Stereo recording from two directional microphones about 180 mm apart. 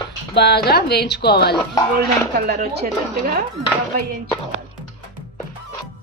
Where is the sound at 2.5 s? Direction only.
55° right (ahead or behind).